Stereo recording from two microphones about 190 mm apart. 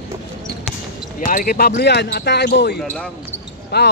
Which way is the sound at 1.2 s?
45° left (ahead or behind).